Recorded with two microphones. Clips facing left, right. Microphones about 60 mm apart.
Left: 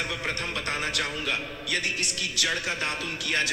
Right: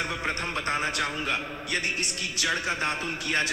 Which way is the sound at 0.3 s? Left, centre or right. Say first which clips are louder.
Right 2 dB; right.